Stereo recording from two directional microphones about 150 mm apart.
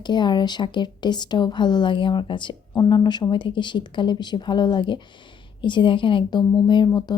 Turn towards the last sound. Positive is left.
turn(degrees=30)  # may be behind; listen again after turning